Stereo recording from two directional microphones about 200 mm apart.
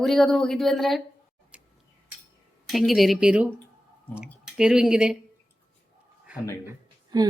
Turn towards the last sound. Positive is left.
turn(degrees=-20)  # may be behind; listen again after turning